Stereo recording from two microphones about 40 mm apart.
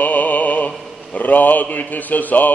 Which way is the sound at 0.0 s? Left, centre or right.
Left.